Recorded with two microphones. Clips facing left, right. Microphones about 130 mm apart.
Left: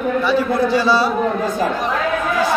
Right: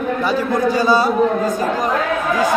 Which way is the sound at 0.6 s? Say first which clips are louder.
Right 1 dB; 45° right (ahead or behind).